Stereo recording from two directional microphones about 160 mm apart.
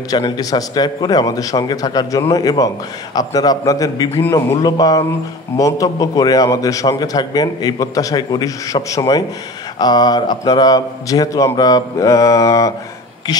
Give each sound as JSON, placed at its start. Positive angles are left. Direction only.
{"t": 0.1, "sound": "a man's voice", "side_deg": 25}